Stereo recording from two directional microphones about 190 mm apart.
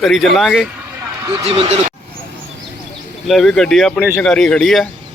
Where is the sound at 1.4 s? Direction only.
30° right (ahead or behind).